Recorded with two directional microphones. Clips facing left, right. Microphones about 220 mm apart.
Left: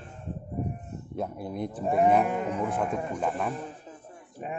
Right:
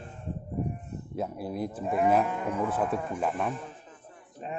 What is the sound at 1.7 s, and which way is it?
Speech, 30° left (ahead or behind).